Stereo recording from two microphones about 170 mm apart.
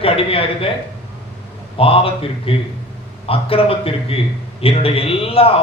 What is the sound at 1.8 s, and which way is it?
A man's voice, 35° left (ahead or behind).